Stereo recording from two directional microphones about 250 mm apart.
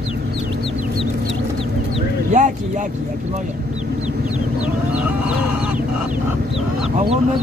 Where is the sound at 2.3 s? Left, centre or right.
Right.